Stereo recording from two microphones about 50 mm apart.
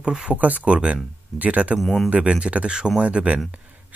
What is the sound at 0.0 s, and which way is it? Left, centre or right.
Speech, centre.